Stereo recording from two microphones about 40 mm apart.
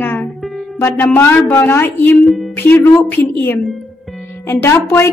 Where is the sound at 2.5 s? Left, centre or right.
Left.